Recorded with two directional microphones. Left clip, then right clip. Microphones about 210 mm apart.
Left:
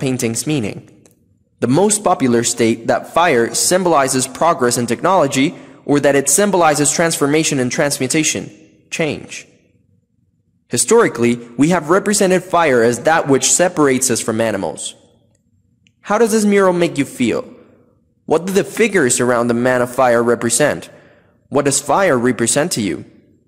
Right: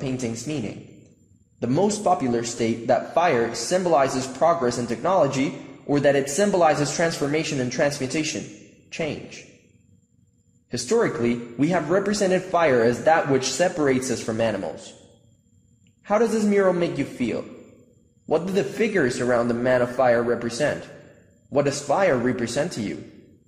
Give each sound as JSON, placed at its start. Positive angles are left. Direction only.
{"t": 0.0, "sound": "a man's voice", "side_deg": 45}
{"t": 10.7, "sound": "a man's voice", "side_deg": 45}
{"t": 16.0, "sound": "a man's voice", "side_deg": 45}